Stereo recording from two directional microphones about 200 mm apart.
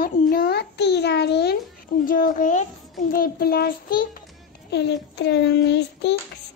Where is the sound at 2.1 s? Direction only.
40° left (ahead or behind).